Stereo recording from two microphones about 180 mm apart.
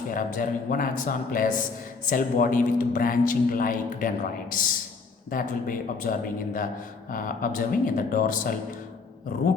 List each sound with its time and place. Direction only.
0.1 s speech: 50° left (ahead or behind)